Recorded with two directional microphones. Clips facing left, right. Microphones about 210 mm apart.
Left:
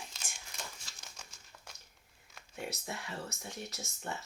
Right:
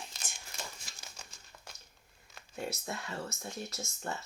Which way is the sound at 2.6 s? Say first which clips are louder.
Right 2 dB; 15° left (ahead or behind).